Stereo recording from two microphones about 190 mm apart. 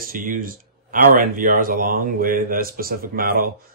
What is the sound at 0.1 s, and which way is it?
Speech, 45° right (ahead or behind).